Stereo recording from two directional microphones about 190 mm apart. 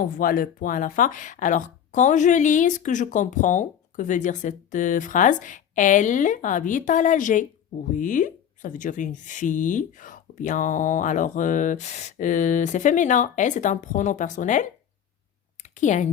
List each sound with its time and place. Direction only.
0.2 s speech: 50° left (ahead or behind)